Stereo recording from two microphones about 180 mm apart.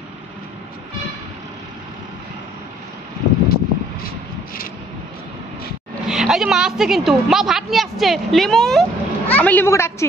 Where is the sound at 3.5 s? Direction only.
55° left (ahead or behind).